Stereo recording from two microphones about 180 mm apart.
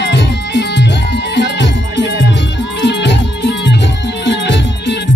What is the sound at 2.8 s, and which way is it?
Music, 75° left (ahead or behind).